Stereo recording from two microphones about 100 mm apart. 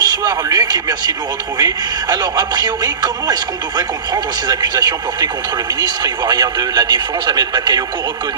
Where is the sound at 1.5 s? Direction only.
40° right (ahead or behind).